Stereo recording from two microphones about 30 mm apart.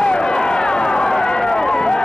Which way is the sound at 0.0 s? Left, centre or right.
Left.